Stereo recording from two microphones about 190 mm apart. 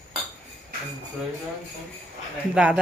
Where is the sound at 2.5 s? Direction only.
5° right (ahead or behind).